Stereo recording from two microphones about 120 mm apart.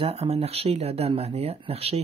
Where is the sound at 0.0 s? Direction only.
55° right (ahead or behind).